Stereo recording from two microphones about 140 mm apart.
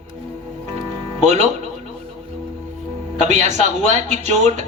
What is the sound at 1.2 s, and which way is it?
Speech, 50° right (ahead or behind).